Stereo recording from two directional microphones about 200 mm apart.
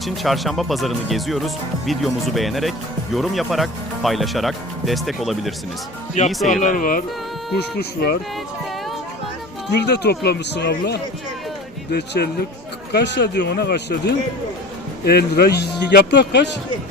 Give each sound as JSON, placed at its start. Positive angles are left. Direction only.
{"t": 0.0, "sound": "speech", "side_deg": 0}
{"t": 6.5, "sound": "speech", "side_deg": 40}
{"t": 9.7, "sound": "a man's voice", "side_deg": 55}